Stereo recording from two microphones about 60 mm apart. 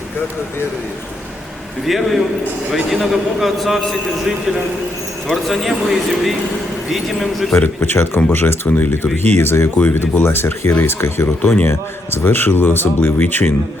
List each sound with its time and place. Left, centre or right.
1.8 s a man's voice: centre
5.3 s a man's voice: centre
7.8 s speech: left